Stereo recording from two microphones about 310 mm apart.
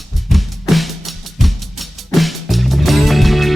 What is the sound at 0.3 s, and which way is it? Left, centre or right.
Drum, centre.